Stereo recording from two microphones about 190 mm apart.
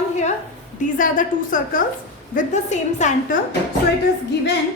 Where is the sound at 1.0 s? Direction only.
45° left (ahead or behind).